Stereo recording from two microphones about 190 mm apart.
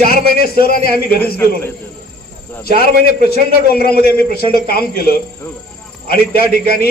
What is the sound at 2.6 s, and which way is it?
Speech, 50° left (ahead or behind).